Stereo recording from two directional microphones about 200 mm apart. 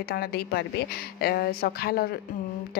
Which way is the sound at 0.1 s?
50° left (ahead or behind).